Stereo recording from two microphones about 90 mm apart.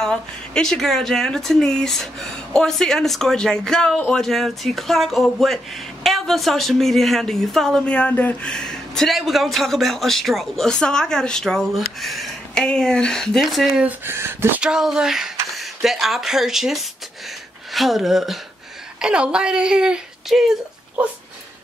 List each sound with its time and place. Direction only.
0.0 s a woman's voice: 5° left (ahead or behind)
13.8 s speech: 25° right (ahead or behind)
14.6 s a woman's voice: 5° right (ahead or behind)